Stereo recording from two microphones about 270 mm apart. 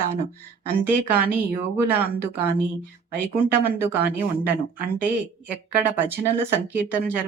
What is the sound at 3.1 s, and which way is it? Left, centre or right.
Speech, centre.